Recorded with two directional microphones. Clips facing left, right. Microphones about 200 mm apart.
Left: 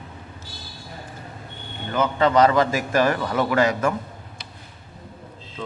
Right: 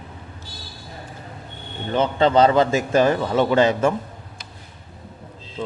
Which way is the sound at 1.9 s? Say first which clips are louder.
Right 2 dB; 30° right (ahead or behind).